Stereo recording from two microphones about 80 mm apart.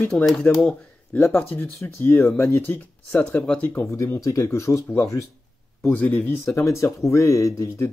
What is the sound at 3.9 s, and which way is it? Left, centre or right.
Speech, left.